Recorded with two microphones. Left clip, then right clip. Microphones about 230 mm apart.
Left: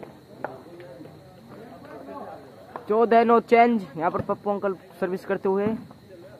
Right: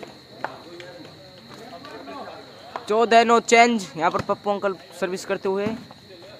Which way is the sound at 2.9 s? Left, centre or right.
Centre.